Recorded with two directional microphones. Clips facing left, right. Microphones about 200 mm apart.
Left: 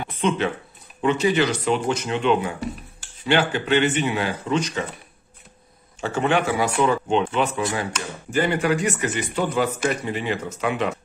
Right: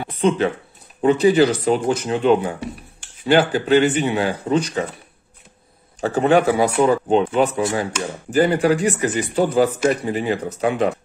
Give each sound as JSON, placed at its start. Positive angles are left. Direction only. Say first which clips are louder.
{"t": 0.1, "sound": "speech", "louder": "right 5 dB", "side_deg": -35}
{"t": 4.2, "sound": "speech", "louder": "right 4 dB", "side_deg": -45}
{"t": 5.9, "sound": "speech", "louder": "right 6 dB", "side_deg": -35}